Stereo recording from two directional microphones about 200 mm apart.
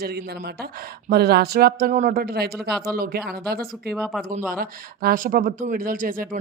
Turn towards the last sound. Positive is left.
turn(degrees=-45)  # may be behind; listen again after turning